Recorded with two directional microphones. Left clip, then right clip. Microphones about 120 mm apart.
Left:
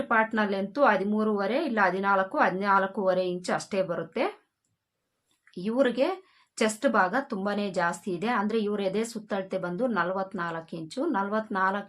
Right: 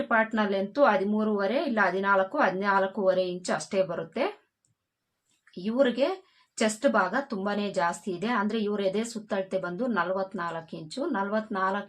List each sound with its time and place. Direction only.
0.1 s a woman's voice: 30° left (ahead or behind)
5.6 s a woman's voice: 35° left (ahead or behind)